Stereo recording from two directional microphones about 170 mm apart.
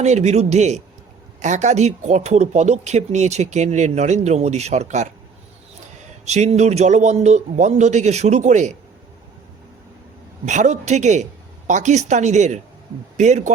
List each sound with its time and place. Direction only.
0.0 s speech: 40° right (ahead or behind)
6.2 s speech: 40° right (ahead or behind)
10.4 s speech: 45° right (ahead or behind)